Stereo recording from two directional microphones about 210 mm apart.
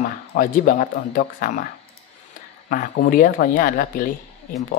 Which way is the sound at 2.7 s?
40° left (ahead or behind).